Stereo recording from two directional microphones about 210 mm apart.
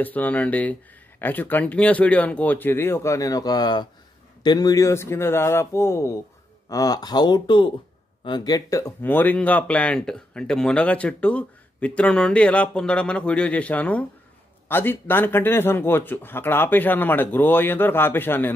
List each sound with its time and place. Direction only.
0.0 s speech: 10° left (ahead or behind)